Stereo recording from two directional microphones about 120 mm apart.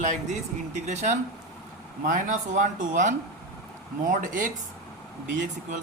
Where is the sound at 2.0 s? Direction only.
90° right.